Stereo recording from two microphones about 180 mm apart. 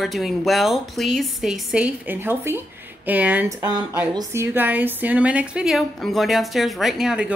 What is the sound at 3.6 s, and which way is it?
Speech, 20° right (ahead or behind).